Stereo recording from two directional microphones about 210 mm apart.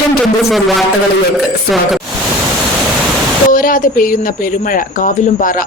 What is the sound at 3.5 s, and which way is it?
Speech, 40° left (ahead or behind).